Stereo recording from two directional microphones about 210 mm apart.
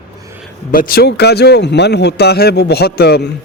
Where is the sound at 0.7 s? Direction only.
45° left (ahead or behind).